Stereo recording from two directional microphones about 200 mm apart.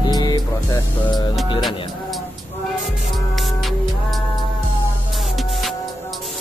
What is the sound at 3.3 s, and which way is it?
Music, centre (ahead or behind).